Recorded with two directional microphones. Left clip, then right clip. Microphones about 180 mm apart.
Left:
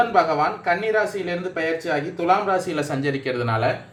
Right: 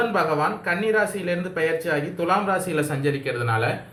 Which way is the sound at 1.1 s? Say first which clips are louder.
Even; 40° left (ahead or behind).